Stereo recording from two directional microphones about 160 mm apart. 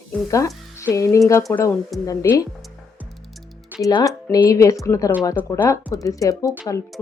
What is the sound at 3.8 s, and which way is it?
Speech, 20° left (ahead or behind).